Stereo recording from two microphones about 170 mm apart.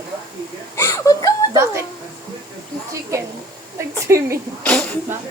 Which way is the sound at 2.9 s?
20° right (ahead or behind).